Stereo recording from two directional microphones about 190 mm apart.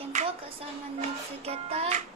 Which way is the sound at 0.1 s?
35° right (ahead or behind).